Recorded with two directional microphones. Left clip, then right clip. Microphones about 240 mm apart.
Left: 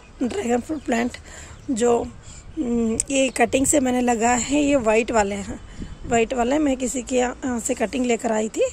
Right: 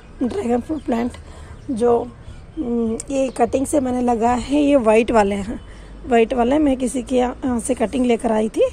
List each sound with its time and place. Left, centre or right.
0.2 s a woman's voice: centre